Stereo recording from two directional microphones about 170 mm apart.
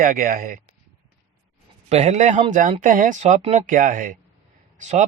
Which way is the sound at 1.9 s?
40° right (ahead or behind).